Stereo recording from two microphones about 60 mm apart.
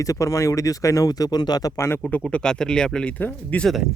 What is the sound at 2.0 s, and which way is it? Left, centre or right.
Speech, left.